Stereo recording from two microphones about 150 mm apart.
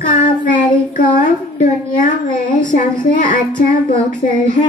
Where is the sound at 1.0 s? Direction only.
60° left (ahead or behind).